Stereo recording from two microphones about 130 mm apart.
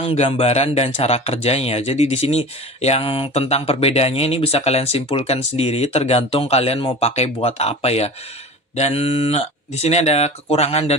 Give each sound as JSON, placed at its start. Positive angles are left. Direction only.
{"t": 0.1, "sound": "speech", "side_deg": 50}